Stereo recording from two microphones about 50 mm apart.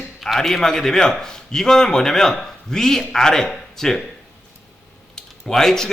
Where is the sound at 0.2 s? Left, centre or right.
Centre.